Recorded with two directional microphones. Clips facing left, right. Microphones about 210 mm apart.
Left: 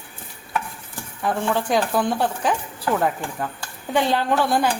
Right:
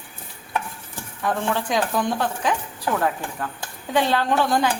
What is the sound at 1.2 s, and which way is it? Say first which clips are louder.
Speech: left 1 dB; 10° left (ahead or behind).